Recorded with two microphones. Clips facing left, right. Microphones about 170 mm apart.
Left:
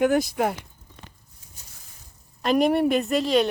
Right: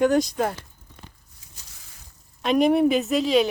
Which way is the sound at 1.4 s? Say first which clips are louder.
Right 1 dB; 90° right.